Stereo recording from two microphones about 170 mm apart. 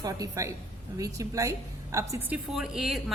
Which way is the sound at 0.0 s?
20° right (ahead or behind).